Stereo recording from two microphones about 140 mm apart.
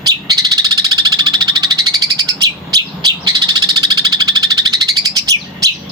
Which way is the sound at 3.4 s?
30° right (ahead or behind).